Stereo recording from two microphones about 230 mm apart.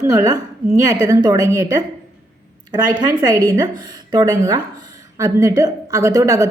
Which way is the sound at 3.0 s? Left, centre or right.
Centre.